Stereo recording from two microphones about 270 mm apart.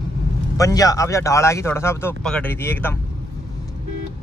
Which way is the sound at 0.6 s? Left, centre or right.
Centre.